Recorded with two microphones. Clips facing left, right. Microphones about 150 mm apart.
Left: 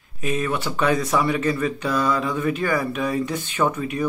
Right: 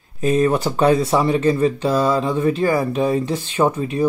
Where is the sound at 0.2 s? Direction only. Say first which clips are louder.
Right 8 dB; 35° right (ahead or behind).